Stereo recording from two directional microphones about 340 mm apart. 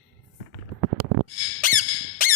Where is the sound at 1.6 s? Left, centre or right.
Left.